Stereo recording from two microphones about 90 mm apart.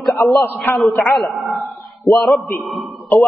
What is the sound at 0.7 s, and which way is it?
Speech, centre (ahead or behind).